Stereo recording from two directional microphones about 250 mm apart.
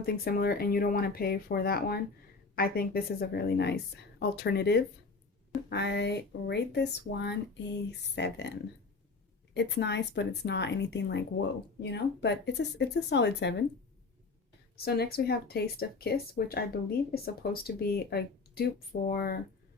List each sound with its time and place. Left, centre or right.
0.0 s speech: left
9.6 s speech: left
14.8 s speech: left